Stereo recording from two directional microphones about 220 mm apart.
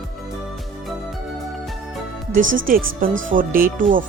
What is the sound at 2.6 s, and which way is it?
Speech, 40° right (ahead or behind).